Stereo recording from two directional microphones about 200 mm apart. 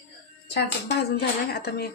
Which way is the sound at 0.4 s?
55° left (ahead or behind).